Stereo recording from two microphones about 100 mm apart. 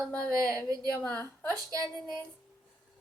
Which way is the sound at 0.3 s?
30° right (ahead or behind).